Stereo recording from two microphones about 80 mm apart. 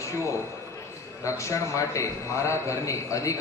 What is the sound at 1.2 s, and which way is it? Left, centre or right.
A man's voice, left.